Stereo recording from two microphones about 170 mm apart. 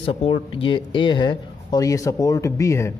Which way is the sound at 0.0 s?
35° left (ahead or behind).